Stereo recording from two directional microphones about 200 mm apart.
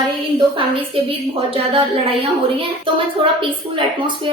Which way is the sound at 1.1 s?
25° right (ahead or behind).